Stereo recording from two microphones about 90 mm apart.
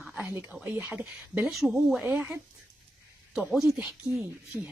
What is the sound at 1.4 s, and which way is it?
Speech, centre (ahead or behind).